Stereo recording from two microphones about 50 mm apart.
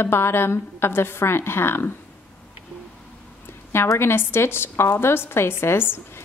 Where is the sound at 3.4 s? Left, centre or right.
Left.